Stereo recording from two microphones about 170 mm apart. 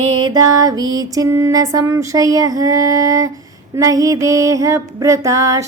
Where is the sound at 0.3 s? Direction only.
25° right (ahead or behind).